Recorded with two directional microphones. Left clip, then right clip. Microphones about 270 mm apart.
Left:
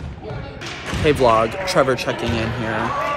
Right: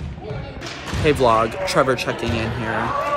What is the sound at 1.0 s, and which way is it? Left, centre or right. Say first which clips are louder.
Speech: left 1 dB; centre.